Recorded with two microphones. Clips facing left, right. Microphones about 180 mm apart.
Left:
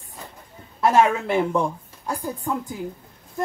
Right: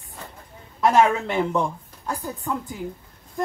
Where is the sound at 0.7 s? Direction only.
5° left (ahead or behind).